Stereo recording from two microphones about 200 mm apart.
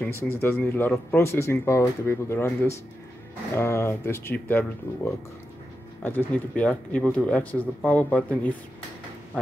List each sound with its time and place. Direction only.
0.0 s speech: 15° left (ahead or behind)